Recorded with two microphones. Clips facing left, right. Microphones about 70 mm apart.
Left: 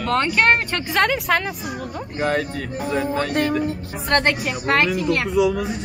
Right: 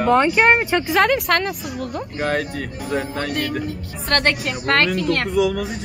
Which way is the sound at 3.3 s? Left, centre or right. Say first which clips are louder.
Left 3 dB; left.